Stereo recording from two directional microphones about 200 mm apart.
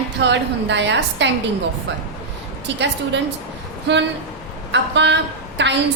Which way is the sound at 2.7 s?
60° right (ahead or behind).